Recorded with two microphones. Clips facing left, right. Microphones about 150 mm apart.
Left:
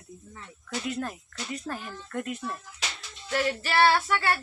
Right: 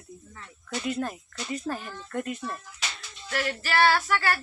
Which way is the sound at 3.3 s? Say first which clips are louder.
Left 2 dB; 25° left (ahead or behind).